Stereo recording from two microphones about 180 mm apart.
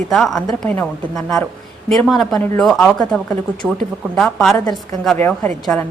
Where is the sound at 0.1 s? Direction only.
Centre (ahead or behind).